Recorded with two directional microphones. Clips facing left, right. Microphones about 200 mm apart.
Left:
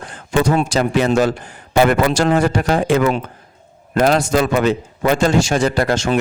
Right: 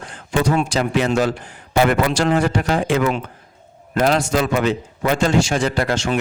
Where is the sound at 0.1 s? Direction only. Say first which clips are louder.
Left 2 dB; 45° left (ahead or behind).